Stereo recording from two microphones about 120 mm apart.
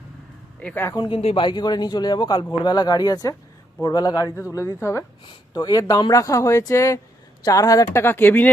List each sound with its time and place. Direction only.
0.6 s speech: 15° left (ahead or behind)
0.9 s speech: 45° left (ahead or behind)
4.4 s speech: 25° left (ahead or behind)